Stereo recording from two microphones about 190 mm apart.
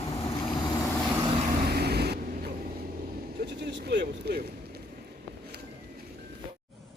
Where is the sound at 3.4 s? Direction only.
60° right (ahead or behind).